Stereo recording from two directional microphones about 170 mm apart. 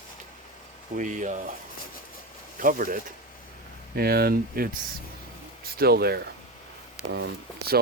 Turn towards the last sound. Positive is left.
turn(degrees=-80)